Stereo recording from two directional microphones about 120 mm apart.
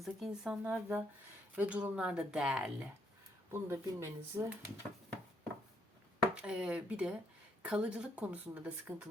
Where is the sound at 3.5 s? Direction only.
20° right (ahead or behind).